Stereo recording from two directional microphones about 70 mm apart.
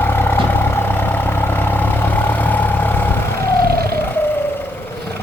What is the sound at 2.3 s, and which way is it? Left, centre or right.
Vehicle, left.